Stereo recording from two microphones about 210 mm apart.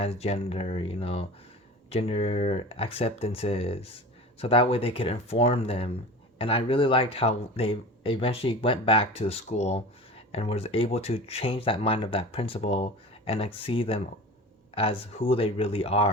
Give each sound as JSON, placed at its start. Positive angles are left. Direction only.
{"t": 0.0, "sound": "speech", "side_deg": 30}